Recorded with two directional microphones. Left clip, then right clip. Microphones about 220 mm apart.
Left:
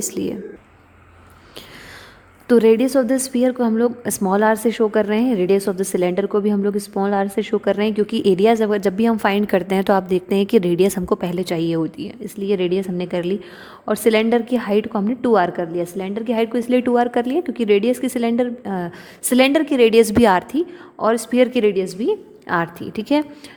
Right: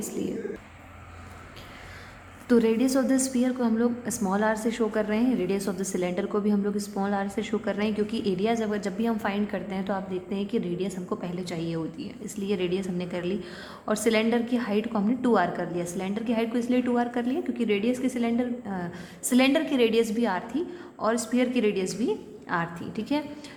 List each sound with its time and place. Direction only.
0.1 s a woman's voice: 50° left (ahead or behind)
2.5 s a woman's voice: 45° left (ahead or behind)